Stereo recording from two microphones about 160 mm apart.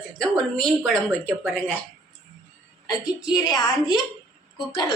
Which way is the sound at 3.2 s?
25° left (ahead or behind).